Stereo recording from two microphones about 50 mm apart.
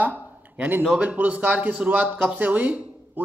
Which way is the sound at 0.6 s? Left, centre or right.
Right.